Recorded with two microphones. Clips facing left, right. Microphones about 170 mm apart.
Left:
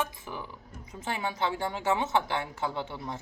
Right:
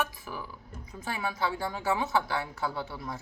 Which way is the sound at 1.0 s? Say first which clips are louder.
Left 1 dB; 25° left (ahead or behind).